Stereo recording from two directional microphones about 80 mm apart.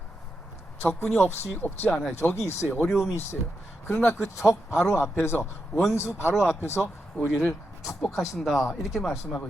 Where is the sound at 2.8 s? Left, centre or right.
Centre.